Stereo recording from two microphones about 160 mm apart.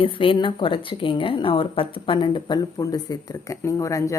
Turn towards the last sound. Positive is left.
turn(degrees=20)  # may be behind; listen again after turning